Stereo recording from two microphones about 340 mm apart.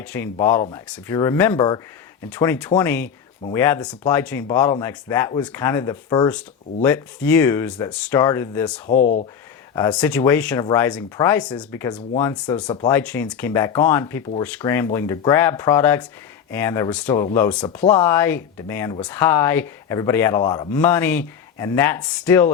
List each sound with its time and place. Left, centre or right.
0.0 s speech: centre
8.9 s speech: left
9.7 s speech: centre